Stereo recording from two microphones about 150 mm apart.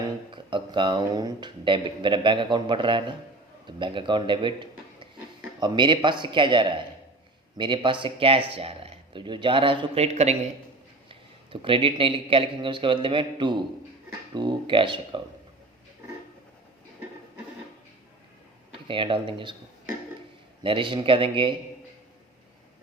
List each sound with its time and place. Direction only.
0.3 s a man's voice: 35° right (ahead or behind)
18.7 s speech: 35° right (ahead or behind)
20.7 s speech: 35° right (ahead or behind)